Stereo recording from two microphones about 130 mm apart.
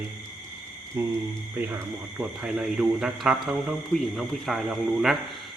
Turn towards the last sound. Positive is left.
turn(degrees=0)  # may be behind; listen again after turning